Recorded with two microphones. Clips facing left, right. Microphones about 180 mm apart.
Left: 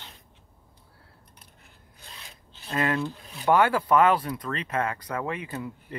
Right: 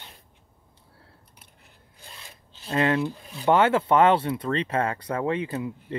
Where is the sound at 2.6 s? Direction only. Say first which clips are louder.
Right 4 dB; 25° right (ahead or behind).